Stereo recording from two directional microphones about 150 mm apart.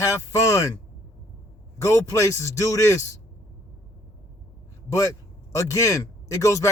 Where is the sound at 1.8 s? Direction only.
20° left (ahead or behind).